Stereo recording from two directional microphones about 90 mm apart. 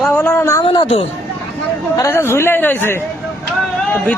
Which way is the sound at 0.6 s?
70° left (ahead or behind).